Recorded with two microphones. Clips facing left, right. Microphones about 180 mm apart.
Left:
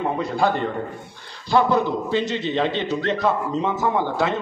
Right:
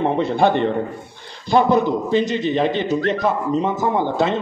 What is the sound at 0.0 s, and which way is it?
A man's voice, 25° right (ahead or behind).